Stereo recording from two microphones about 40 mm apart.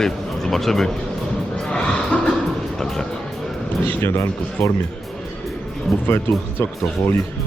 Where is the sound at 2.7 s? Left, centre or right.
Centre.